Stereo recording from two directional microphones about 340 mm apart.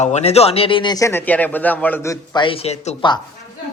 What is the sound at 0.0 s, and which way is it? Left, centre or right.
A man's voice, centre.